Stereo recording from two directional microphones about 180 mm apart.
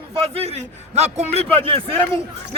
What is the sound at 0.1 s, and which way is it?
A man's voice, 35° right (ahead or behind).